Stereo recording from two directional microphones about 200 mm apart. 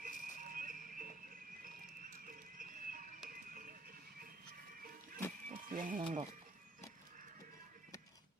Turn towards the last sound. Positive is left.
turn(degrees=-40)  # may be behind; listen again after turning